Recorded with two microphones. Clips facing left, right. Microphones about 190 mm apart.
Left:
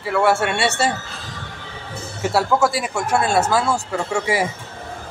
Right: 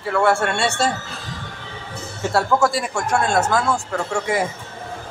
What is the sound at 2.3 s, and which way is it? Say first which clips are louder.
Speech: even; 5° left (ahead or behind).